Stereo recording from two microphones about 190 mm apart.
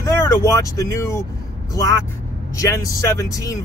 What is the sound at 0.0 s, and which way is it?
Speech, 15° left (ahead or behind).